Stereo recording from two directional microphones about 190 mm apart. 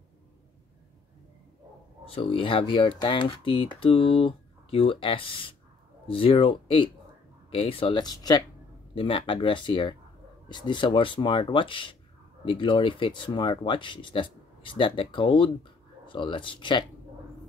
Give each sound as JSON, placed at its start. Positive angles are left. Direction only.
{"t": 2.0, "sound": "speech", "side_deg": 25}